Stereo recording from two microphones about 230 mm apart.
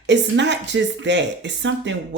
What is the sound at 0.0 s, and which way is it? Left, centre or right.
Speech, right.